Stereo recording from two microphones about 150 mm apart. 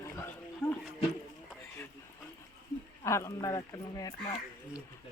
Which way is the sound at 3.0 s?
20° left (ahead or behind).